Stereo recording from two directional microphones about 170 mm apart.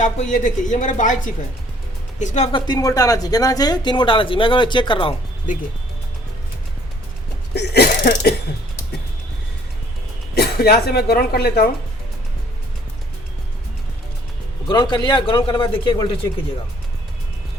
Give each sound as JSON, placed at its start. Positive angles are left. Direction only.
{"t": 0.0, "sound": "speech", "side_deg": 45}
{"t": 2.5, "sound": "speech", "side_deg": 25}
{"t": 5.5, "sound": "speech", "side_deg": 50}
{"t": 7.5, "sound": "a sound", "side_deg": 75}
{"t": 10.3, "sound": "speech", "side_deg": 65}
{"t": 14.7, "sound": "speech", "side_deg": 25}